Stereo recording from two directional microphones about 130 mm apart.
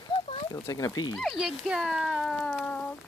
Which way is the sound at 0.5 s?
25° left (ahead or behind).